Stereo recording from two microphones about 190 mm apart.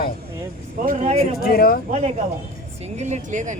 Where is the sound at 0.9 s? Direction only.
35° right (ahead or behind).